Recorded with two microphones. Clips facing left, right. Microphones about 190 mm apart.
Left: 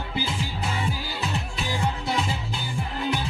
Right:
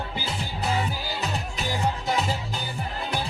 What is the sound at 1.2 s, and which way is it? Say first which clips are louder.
Music: even; 40° right (ahead or behind).